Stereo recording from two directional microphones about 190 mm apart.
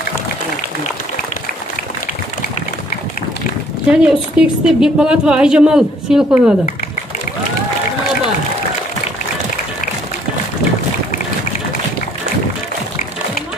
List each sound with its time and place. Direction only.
3.9 s a woman's voice: 5° right (ahead or behind)